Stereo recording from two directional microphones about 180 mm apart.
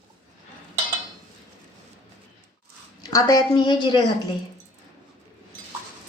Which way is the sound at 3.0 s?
20° left (ahead or behind).